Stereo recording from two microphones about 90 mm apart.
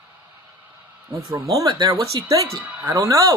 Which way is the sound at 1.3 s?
40° right (ahead or behind).